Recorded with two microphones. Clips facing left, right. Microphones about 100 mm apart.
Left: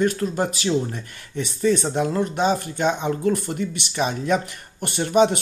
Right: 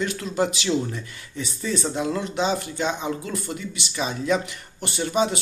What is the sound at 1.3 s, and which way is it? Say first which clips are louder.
Speech: left 7 dB; 55° left (ahead or behind).